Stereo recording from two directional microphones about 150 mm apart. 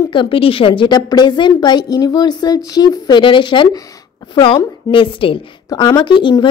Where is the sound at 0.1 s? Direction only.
35° left (ahead or behind).